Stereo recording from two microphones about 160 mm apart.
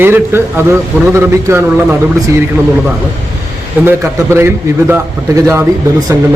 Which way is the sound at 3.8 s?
15° right (ahead or behind).